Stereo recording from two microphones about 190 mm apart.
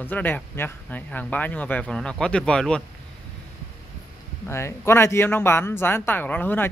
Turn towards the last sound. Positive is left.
turn(degrees=10)  # may be behind; listen again after turning